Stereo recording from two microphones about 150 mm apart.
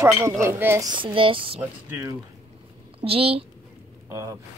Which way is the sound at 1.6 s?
20° right (ahead or behind).